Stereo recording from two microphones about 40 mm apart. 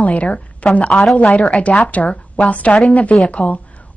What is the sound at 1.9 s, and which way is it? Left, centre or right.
Speech, left.